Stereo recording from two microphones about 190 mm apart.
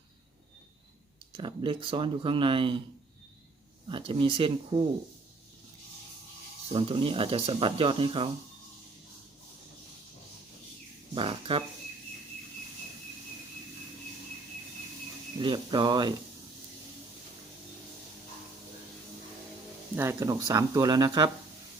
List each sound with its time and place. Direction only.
1.4 s speech: 25° right (ahead or behind)
3.8 s speech: 25° right (ahead or behind)
6.7 s speech: 30° right (ahead or behind)
11.1 s speech: 30° right (ahead or behind)
15.4 s speech: 25° right (ahead or behind)
20.0 s speech: 15° right (ahead or behind)